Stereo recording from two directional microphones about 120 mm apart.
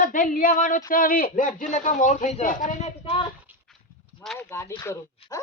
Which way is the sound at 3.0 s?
45° left (ahead or behind).